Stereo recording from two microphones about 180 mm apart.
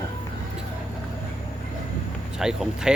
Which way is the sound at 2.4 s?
5° right (ahead or behind).